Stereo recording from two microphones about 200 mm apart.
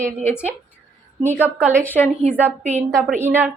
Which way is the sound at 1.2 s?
10° left (ahead or behind).